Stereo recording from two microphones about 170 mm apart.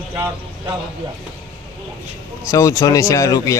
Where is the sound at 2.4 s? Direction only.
20° left (ahead or behind).